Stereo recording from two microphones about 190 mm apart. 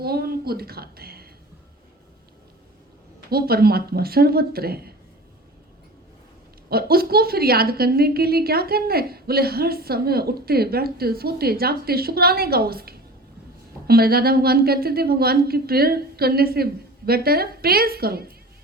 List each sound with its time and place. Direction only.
0.0 s a woman's voice: 55° right (ahead or behind)
3.2 s a woman's voice: 55° right (ahead or behind)
6.7 s a woman's voice: 55° right (ahead or behind)